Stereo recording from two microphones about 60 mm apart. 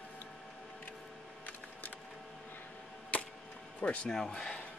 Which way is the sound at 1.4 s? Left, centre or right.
Left.